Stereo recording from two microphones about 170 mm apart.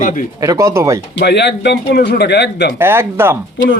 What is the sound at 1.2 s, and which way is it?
A man's voice, 85° left.